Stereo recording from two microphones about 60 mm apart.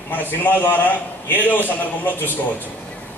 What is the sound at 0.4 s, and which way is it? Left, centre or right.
A man's voice, left.